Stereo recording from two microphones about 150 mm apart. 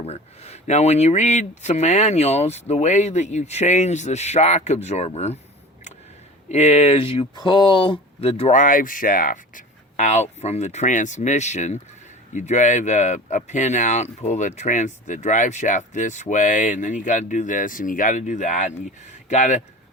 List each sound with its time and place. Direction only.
0.0 s speech: 45° left (ahead or behind)
6.5 s speech: 50° left (ahead or behind)
8.5 s speech: 60° left (ahead or behind)